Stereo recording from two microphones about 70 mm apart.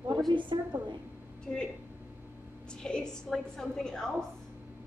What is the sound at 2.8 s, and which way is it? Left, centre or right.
A woman's voice, centre.